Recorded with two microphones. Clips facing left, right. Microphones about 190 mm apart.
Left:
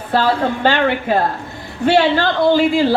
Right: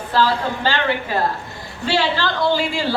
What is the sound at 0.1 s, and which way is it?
A woman's voice, 55° left (ahead or behind).